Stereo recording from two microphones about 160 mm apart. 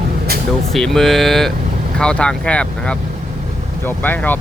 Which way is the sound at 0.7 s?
Centre (ahead or behind).